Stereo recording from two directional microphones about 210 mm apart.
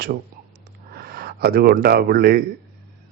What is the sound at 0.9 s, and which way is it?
A man's voice, 45° right (ahead or behind).